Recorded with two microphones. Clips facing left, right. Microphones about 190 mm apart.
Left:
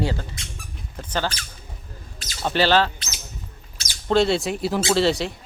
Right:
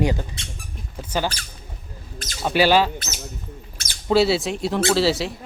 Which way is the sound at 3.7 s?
55° right (ahead or behind).